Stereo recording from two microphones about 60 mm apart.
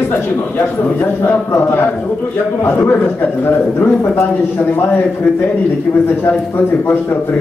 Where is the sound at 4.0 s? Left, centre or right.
Left.